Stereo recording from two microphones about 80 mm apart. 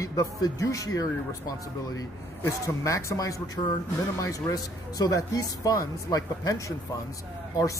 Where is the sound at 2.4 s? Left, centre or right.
Left.